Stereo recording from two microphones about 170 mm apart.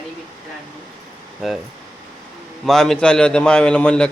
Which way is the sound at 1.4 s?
Centre (ahead or behind).